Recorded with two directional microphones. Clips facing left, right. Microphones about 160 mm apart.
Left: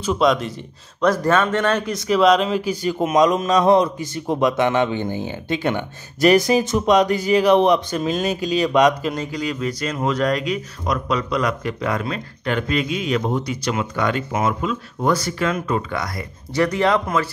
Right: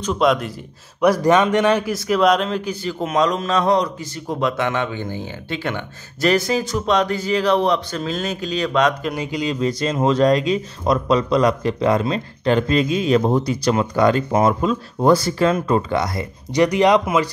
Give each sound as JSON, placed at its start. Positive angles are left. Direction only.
{"t": 0.0, "sound": "speech", "side_deg": 0}
{"t": 1.0, "sound": "speech", "side_deg": -15}
{"t": 9.1, "sound": "speech", "side_deg": -15}